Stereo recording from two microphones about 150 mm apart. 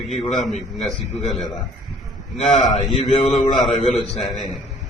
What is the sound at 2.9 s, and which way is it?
Mantra, 45° left (ahead or behind).